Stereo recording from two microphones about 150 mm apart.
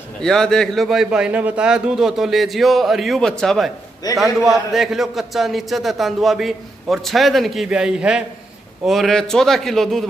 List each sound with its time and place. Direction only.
0.2 s a man's voice: 5° left (ahead or behind)
4.0 s a man's voice: 25° left (ahead or behind)
4.5 s a man's voice: centre (ahead or behind)